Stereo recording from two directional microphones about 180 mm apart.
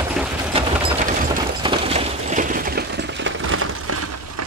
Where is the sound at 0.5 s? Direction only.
35° right (ahead or behind).